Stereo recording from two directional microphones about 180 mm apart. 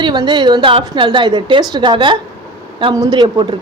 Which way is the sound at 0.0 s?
25° right (ahead or behind).